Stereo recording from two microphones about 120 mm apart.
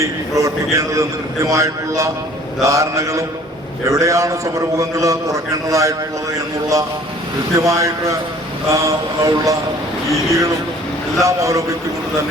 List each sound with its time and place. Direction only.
0.0 s a man's voice: 25° right (ahead or behind)
7.6 s a man's voice: 25° right (ahead or behind)